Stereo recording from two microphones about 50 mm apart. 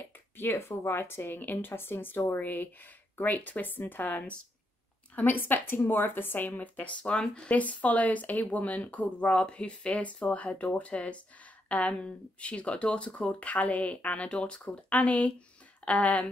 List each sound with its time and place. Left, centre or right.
0.4 s speech: left
1.7 s speech: left